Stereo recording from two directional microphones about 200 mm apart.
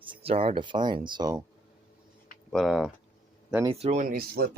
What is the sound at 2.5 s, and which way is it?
Speech, centre (ahead or behind).